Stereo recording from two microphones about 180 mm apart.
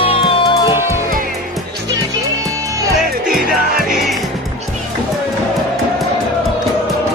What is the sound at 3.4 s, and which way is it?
Music, 55° right (ahead or behind).